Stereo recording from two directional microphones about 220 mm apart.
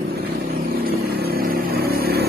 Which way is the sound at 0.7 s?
45° right (ahead or behind).